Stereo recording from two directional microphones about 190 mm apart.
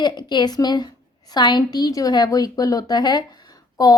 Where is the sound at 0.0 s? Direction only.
25° left (ahead or behind).